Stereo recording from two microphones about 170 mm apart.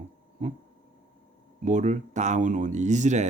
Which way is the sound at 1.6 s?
45° right (ahead or behind).